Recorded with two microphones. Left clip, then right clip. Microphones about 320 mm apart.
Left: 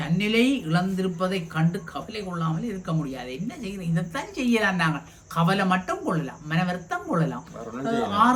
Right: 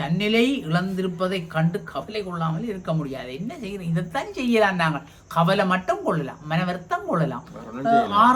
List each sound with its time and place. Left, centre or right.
0.0 s speech: centre